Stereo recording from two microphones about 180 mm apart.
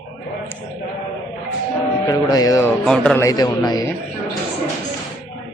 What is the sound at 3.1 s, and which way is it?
Music, 20° left (ahead or behind).